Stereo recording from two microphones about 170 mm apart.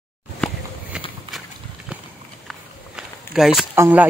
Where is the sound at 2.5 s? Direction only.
5° right (ahead or behind).